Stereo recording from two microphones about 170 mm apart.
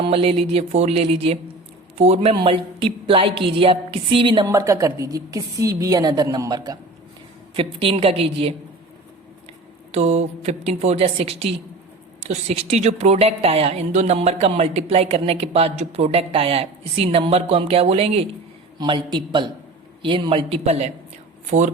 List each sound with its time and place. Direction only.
0.0 s a woman's voice: 35° right (ahead or behind)
4.4 s a woman's voice: 20° right (ahead or behind)
7.5 s a woman's voice: 35° right (ahead or behind)
9.9 s a woman's voice: 40° right (ahead or behind)